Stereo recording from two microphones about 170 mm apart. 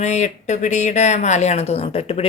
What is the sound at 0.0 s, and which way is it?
Speech, 45° left (ahead or behind).